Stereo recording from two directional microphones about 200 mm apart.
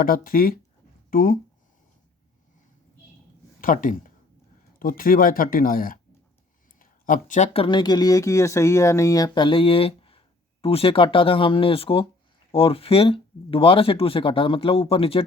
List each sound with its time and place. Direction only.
0.0 s speech: 45° left (ahead or behind)
3.6 s speech: 45° left (ahead or behind)